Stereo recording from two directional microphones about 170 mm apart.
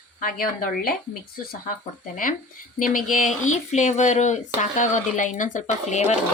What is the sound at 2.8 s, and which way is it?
Speech, 55° left (ahead or behind).